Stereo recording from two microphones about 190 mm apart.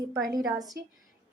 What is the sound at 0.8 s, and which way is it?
Speech, 60° right (ahead or behind).